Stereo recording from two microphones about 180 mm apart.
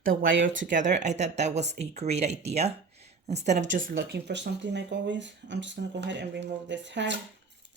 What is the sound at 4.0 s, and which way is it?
Speech, 65° right (ahead or behind).